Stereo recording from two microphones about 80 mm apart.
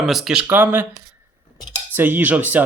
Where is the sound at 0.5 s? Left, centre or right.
Right.